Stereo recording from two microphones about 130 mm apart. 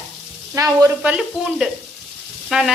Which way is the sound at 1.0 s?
5° right (ahead or behind).